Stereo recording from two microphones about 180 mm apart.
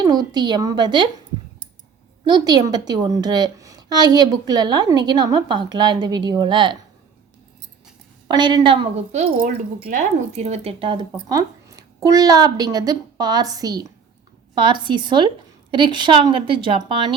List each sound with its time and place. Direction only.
0.0 s a woman's voice: 20° right (ahead or behind)
2.2 s a woman's voice: 20° right (ahead or behind)
8.3 s a woman's voice: 25° right (ahead or behind)
9.4 s a woman's voice: 50° right (ahead or behind); by 17.1 s 25° right (ahead or behind)